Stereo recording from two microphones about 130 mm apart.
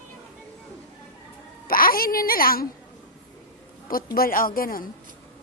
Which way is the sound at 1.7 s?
90° left.